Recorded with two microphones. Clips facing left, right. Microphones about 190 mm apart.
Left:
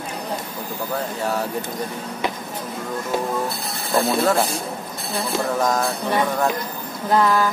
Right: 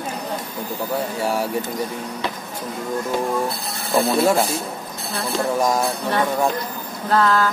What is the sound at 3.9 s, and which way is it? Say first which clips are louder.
Speech: right 2 dB; 10° right (ahead or behind).